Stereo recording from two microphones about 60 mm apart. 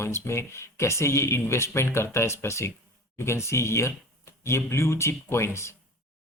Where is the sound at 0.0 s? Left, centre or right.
Left.